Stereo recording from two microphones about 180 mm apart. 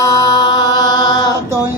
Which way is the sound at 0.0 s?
20° left (ahead or behind).